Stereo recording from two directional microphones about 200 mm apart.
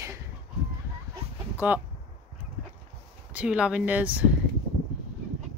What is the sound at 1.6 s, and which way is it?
Speech, 10° right (ahead or behind).